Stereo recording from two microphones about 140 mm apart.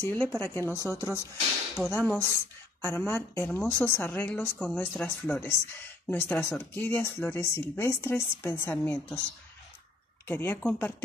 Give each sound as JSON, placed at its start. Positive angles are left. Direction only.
{"t": 0.0, "sound": "speech", "side_deg": 15}
{"t": 10.2, "sound": "speech", "side_deg": 15}